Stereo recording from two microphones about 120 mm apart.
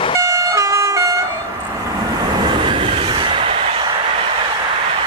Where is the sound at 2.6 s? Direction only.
45° right (ahead or behind).